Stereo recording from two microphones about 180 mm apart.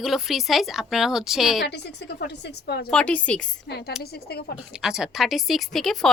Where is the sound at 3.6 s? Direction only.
65° left (ahead or behind).